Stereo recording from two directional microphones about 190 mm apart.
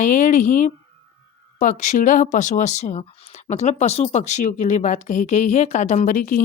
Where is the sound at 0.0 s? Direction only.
45° left (ahead or behind).